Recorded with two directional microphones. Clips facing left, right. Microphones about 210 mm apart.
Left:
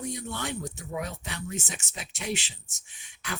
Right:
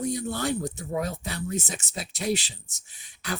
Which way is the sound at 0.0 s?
35° right (ahead or behind).